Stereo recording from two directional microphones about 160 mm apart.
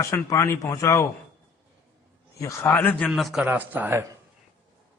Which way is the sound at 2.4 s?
15° left (ahead or behind).